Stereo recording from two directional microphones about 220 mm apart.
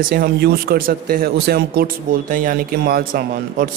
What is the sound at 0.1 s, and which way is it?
Speech, 45° right (ahead or behind).